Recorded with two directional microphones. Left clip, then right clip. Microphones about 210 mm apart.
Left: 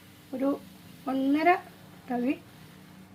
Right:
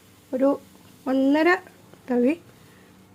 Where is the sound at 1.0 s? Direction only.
55° right (ahead or behind).